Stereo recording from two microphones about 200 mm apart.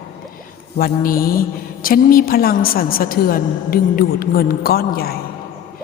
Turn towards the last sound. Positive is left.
turn(degrees=50)  # may be behind; listen again after turning